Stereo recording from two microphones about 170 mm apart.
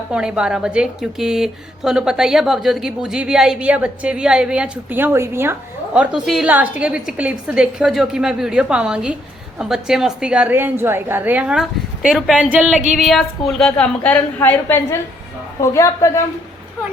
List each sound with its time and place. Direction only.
0.1 s a woman's voice: 5° right (ahead or behind); by 16.2 s 20° left (ahead or behind)